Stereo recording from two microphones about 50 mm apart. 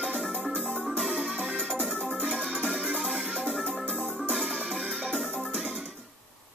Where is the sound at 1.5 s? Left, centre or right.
Centre.